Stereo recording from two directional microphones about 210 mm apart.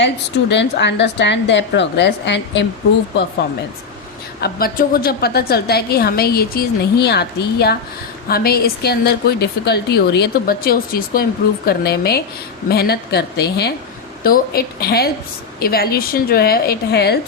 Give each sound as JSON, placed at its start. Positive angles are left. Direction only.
{"t": 0.5, "sound": "a woman's voice", "side_deg": 55}
{"t": 4.4, "sound": "a woman's voice", "side_deg": 45}